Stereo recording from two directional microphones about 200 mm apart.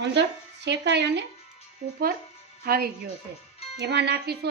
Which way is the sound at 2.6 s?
50° right (ahead or behind).